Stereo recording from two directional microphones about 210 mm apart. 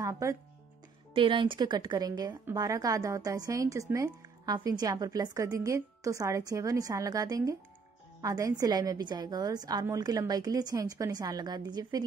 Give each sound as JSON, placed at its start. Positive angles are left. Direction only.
{"t": 0.0, "sound": "a woman's voice", "side_deg": -15}